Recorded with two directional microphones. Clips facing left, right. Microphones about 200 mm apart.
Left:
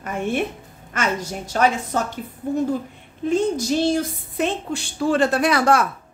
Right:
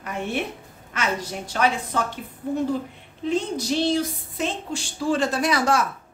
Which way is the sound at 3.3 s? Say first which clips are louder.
Left 4 dB; 45° left (ahead or behind).